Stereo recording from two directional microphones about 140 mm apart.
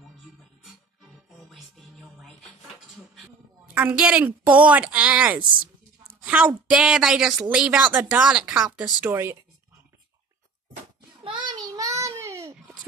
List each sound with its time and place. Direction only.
1.5 s music: centre (ahead or behind)
3.7 s a woman's voice: 10° right (ahead or behind)
9.0 s a woman's voice: 15° right (ahead or behind)
11.2 s child singing: 30° right (ahead or behind)